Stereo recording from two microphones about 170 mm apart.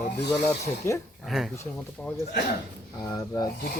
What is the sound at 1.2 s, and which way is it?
Speech, centre (ahead or behind).